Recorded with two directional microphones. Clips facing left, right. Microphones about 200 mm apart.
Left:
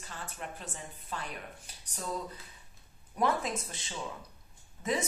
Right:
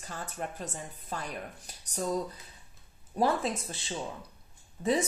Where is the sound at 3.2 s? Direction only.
30° right (ahead or behind).